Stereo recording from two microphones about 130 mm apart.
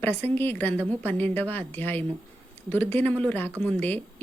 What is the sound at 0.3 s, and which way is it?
Speech, 15° left (ahead or behind).